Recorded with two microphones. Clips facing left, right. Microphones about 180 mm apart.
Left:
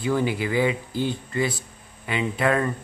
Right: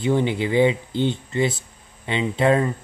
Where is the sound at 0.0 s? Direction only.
25° right (ahead or behind).